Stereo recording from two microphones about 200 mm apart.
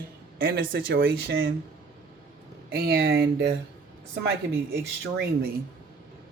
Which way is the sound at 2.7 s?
50° right (ahead or behind).